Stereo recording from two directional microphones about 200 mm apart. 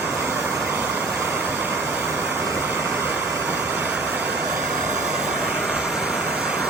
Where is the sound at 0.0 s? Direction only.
10° right (ahead or behind).